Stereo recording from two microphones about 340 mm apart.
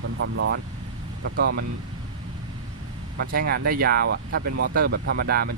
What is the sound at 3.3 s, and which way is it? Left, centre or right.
Speech, right.